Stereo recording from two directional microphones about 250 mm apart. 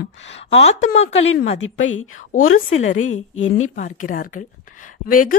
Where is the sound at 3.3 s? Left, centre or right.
Left.